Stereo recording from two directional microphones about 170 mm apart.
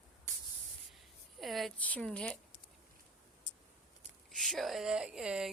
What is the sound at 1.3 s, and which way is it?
Speech, centre (ahead or behind).